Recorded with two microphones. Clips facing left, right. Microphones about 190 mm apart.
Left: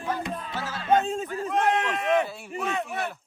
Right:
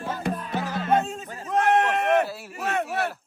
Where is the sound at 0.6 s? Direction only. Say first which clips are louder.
Right 5 dB; 15° right (ahead or behind).